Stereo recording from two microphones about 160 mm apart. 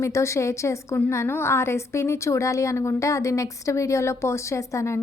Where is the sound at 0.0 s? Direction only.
20° left (ahead or behind).